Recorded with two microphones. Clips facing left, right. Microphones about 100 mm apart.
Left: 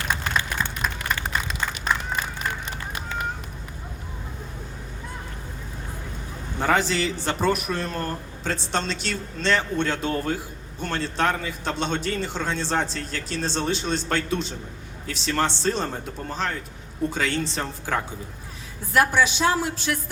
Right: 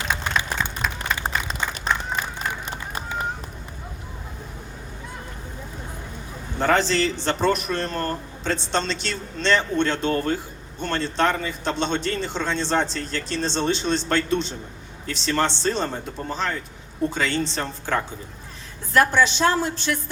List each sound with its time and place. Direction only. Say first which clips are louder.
0.1 s applause: right 1 dB; 15° right (ahead or behind)
1.2 s a sound: right 1 dB; 35° right (ahead or behind)
6.6 s a man's voice: right 2 dB; 10° left (ahead or behind)